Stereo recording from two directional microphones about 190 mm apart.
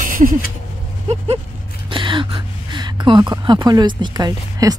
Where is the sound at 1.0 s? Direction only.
30° right (ahead or behind).